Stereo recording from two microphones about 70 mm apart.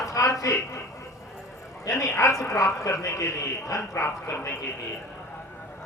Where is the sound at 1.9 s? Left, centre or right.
Left.